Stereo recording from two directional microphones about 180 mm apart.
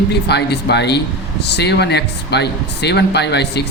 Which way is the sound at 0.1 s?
65° left (ahead or behind).